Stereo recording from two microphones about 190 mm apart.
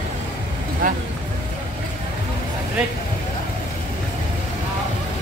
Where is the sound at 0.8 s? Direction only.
50° right (ahead or behind).